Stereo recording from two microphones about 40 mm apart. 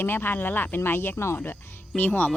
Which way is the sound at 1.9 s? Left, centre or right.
Left.